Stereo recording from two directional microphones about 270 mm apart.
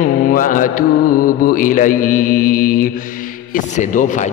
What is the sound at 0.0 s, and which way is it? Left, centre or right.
Mantra, left.